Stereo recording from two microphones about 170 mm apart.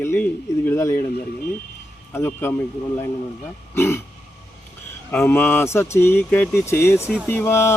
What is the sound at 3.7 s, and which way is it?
Speech, 15° left (ahead or behind).